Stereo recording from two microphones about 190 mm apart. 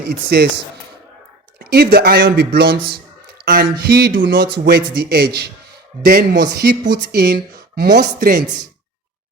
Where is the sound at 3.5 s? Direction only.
50° right (ahead or behind).